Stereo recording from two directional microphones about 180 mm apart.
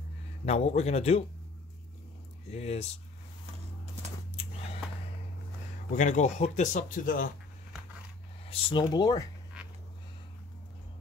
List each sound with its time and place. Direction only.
0.5 s speech: 35° left (ahead or behind)
2.5 s speech: 35° left (ahead or behind)
5.9 s speech: 40° left (ahead or behind)
8.5 s speech: 30° left (ahead or behind)